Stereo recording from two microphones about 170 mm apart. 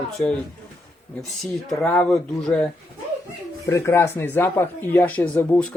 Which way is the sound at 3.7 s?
15° left (ahead or behind).